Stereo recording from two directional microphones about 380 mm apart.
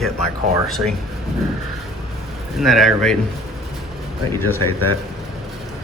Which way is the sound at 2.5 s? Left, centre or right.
Centre.